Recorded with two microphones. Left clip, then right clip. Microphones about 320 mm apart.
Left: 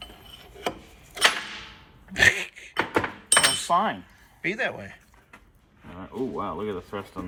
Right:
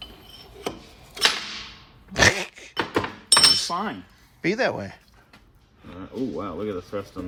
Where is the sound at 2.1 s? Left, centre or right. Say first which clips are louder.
Right 1 dB; centre.